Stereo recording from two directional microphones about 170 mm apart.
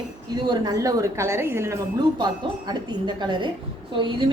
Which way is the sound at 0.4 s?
25° right (ahead or behind).